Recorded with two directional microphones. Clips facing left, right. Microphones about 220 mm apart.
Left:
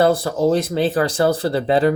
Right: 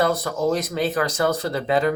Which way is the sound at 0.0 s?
30° left (ahead or behind).